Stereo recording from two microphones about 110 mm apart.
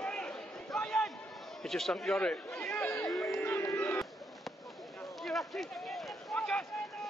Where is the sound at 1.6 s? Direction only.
5° left (ahead or behind).